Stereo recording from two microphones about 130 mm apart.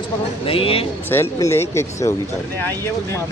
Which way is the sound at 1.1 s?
20° left (ahead or behind).